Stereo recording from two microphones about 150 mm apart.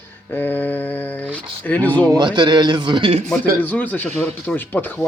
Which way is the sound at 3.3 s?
10° left (ahead or behind).